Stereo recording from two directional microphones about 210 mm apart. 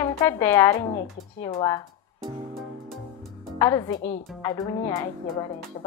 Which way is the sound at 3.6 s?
15° left (ahead or behind).